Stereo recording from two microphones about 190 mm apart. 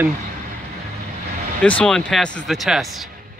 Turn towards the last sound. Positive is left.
turn(degrees=0)  # may be behind; listen again after turning